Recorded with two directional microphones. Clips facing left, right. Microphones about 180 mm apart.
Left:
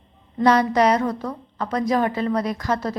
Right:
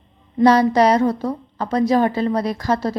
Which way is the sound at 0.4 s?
35° right (ahead or behind).